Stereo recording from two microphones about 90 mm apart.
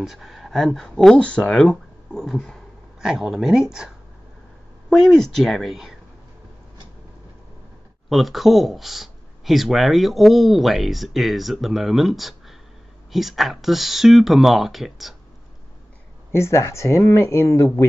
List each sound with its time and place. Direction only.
0.0 s speech: centre (ahead or behind)
8.1 s speech: centre (ahead or behind)
16.3 s speech: 30° left (ahead or behind)